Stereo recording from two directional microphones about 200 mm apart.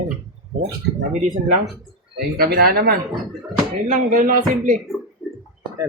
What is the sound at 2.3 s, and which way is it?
Speech, 50° right (ahead or behind).